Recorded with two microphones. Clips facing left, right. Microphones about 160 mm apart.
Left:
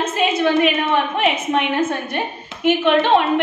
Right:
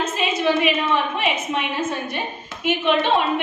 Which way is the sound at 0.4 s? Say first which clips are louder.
Left 2 dB; 60° left (ahead or behind).